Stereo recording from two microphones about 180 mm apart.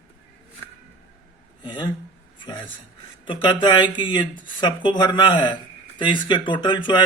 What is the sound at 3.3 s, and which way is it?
Speech, 25° left (ahead or behind).